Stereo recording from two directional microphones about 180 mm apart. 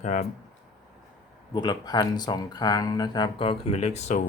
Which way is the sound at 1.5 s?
25° left (ahead or behind).